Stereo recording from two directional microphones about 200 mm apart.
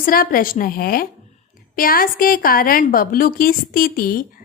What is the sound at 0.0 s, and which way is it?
A woman's voice, 45° left (ahead or behind).